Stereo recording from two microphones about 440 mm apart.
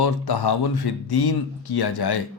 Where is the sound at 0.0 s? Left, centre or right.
Left.